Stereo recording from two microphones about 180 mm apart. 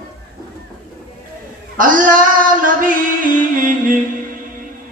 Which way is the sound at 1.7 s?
50° right (ahead or behind).